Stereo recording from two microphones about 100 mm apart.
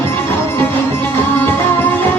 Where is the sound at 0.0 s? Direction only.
20° left (ahead or behind).